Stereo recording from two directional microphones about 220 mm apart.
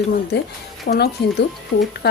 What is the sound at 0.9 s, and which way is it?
Speech, 45° left (ahead or behind).